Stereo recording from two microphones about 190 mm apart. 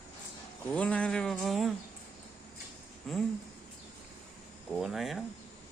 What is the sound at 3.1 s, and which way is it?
Speech, 5° left (ahead or behind).